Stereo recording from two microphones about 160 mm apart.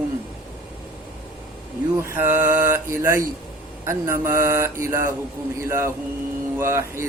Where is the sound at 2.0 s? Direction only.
15° right (ahead or behind).